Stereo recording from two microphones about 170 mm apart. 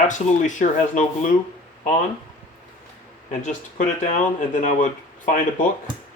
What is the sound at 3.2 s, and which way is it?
Speech, 50° left (ahead or behind).